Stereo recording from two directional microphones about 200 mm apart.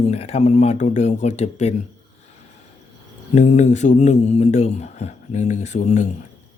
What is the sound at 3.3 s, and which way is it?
Mantra, 35° left (ahead or behind).